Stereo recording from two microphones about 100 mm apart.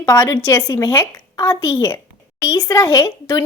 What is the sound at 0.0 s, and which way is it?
Speech, 30° left (ahead or behind).